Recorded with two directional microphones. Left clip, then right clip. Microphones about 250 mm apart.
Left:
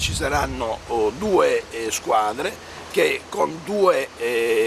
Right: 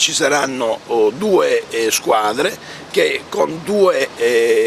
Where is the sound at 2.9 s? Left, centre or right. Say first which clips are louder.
Right 4 dB; right.